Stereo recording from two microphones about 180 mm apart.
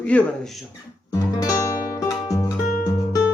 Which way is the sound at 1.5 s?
15° left (ahead or behind).